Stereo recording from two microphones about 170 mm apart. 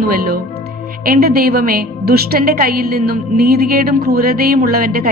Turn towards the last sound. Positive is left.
turn(degrees=-60)  # may be behind; listen again after turning